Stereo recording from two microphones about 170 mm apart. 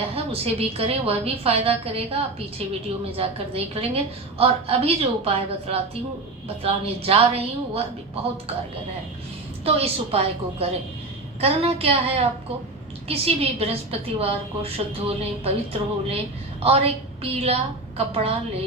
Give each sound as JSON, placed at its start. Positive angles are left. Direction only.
{"t": 0.3, "sound": "a woman's voice", "side_deg": -35}
{"t": 3.2, "sound": "a woman's voice", "side_deg": -35}
{"t": 9.6, "sound": "a woman's voice", "side_deg": -35}